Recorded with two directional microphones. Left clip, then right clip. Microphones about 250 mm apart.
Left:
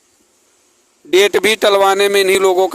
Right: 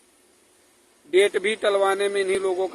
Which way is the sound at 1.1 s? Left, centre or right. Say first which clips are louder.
Left 8 dB; left.